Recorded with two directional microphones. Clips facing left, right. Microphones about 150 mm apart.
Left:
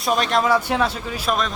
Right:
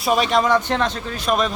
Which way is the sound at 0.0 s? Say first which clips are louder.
Right 2 dB; centre (ahead or behind).